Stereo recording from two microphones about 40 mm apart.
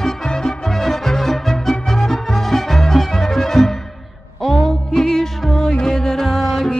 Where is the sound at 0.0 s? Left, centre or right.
Centre.